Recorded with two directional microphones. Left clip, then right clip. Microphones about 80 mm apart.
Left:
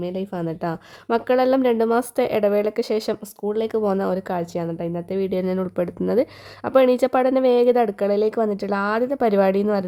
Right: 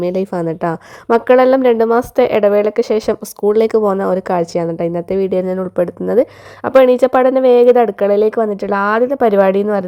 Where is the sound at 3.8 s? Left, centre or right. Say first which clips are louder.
Right 7 dB; right.